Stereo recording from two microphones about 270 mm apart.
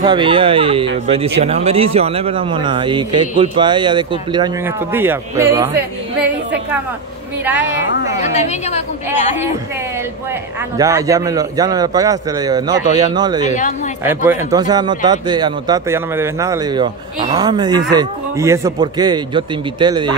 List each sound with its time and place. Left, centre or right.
0.0 s a man's voice: centre
8.2 s a woman's voice: left
10.8 s a man's voice: centre
13.5 s a woman's voice: left
14.0 s a man's voice: centre